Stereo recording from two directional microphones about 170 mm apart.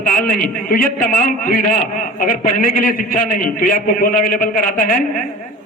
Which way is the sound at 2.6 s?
55° left (ahead or behind).